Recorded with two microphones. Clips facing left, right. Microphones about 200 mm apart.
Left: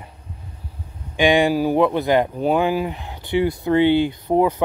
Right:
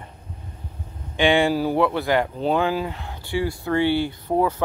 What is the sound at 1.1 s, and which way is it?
Speech, 15° left (ahead or behind).